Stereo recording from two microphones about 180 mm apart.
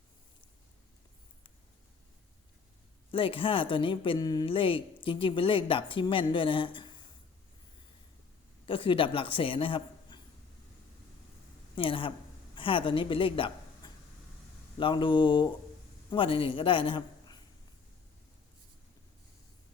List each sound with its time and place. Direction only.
3.1 s speech: 30° left (ahead or behind)
8.6 s a man's voice: 30° left (ahead or behind)
11.7 s a woman's voice: 30° left (ahead or behind)